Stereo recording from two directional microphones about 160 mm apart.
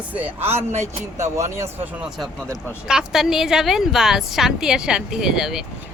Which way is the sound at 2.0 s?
Centre (ahead or behind).